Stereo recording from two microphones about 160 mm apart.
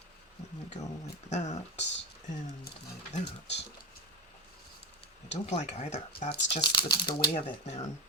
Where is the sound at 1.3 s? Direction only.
45° left (ahead or behind).